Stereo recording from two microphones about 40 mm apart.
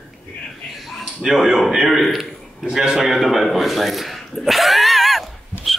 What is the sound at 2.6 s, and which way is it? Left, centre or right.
Speech, centre.